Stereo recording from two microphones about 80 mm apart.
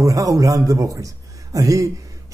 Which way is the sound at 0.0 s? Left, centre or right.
Right.